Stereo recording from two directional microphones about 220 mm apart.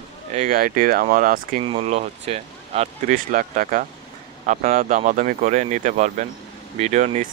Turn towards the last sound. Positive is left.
turn(degrees=-35)  # may be behind; listen again after turning